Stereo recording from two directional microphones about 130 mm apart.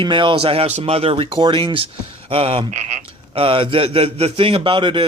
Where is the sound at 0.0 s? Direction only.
40° right (ahead or behind).